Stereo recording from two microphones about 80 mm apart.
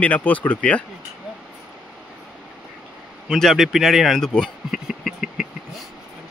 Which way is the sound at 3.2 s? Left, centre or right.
Centre.